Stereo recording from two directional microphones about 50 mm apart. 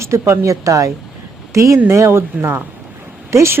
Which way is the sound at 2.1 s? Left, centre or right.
Right.